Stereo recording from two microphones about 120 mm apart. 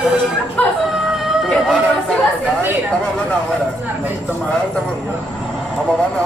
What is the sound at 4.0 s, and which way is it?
Speech, 15° right (ahead or behind).